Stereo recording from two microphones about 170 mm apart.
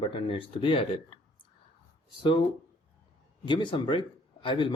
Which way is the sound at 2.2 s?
30° left (ahead or behind).